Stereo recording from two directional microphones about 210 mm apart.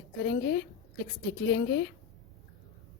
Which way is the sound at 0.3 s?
50° left (ahead or behind).